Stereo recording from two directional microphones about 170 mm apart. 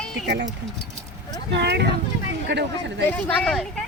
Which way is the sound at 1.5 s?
85° right.